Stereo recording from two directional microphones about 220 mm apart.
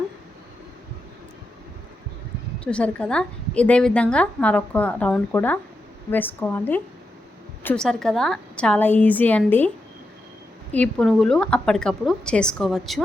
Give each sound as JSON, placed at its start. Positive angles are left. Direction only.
{"t": 2.6, "sound": "a woman's voice", "side_deg": 5}